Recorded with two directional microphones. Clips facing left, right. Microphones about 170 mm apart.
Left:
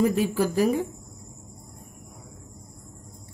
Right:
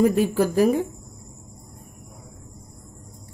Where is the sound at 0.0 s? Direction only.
50° right (ahead or behind).